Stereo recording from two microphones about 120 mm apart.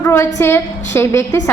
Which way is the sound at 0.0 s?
20° left (ahead or behind).